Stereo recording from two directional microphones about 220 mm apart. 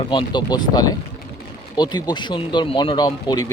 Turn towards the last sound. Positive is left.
turn(degrees=20)  # may be behind; listen again after turning